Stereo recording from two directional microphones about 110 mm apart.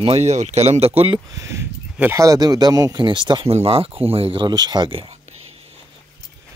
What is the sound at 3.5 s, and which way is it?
Speech, 65° right (ahead or behind).